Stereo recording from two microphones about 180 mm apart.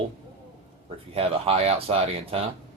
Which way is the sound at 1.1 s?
35° right (ahead or behind).